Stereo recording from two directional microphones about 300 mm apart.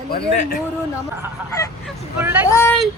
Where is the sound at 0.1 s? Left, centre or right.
Left.